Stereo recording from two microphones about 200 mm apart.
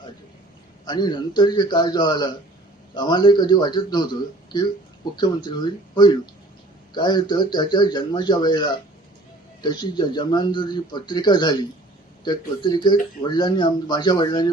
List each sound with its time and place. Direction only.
0.9 s speech: 20° left (ahead or behind)